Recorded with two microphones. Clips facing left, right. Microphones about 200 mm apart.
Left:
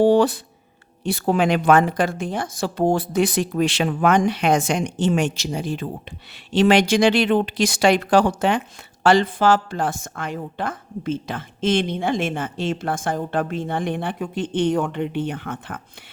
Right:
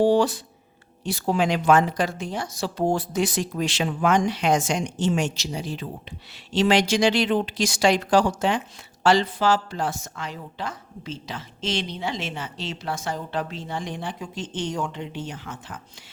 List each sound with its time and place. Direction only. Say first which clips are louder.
0.0 s a woman's voice: left 3 dB; 55° left (ahead or behind)